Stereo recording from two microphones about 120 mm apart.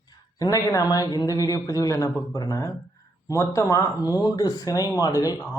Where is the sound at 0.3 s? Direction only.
30° left (ahead or behind).